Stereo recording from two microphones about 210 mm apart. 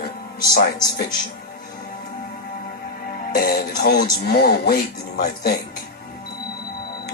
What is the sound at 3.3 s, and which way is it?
Speech, 45° left (ahead or behind).